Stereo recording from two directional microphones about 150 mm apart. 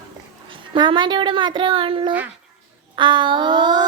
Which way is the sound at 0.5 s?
35° right (ahead or behind).